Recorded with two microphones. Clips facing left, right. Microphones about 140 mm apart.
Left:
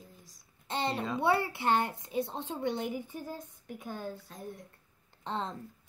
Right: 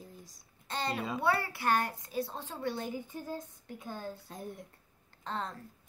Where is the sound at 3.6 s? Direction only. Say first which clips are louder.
Left 2 dB; 15° left (ahead or behind).